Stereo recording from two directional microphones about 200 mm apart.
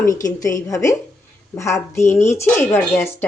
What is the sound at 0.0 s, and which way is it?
Speech, 15° left (ahead or behind).